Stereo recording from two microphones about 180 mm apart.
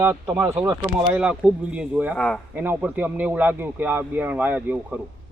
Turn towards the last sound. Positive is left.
turn(degrees=-10)  # may be behind; listen again after turning